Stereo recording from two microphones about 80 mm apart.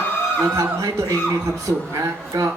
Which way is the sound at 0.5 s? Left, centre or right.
Right.